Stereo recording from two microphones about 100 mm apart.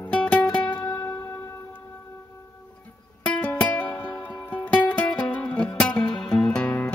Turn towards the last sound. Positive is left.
turn(degrees=15)  # may be behind; listen again after turning